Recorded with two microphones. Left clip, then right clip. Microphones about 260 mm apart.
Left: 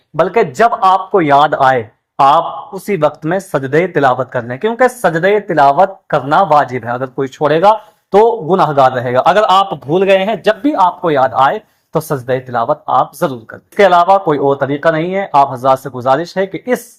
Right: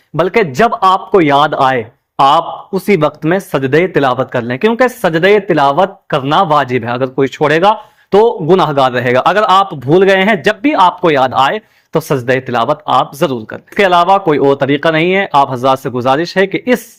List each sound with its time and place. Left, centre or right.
0.2 s a man's voice: right